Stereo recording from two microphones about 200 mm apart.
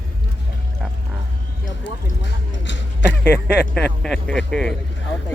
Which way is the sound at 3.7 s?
5° left (ahead or behind).